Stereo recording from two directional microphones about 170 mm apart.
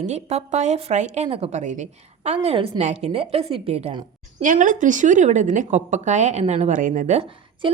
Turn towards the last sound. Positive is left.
turn(degrees=-35)  # may be behind; listen again after turning